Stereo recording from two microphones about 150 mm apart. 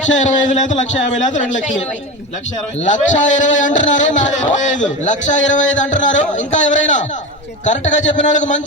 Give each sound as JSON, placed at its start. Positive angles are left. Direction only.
{"t": 0.0, "sound": "a man's voice", "side_deg": 55}
{"t": 2.8, "sound": "a man's voice", "side_deg": 55}